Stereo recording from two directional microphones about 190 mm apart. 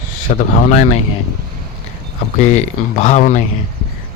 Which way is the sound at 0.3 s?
40° left (ahead or behind).